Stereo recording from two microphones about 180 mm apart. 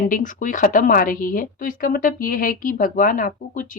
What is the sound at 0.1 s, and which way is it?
Speech, 45° left (ahead or behind).